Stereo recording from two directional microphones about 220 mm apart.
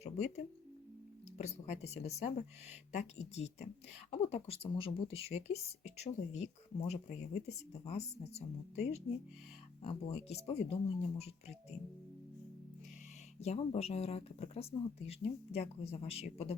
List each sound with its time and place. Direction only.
0.0 s speech: 30° left (ahead or behind)
13.4 s speech: 30° left (ahead or behind)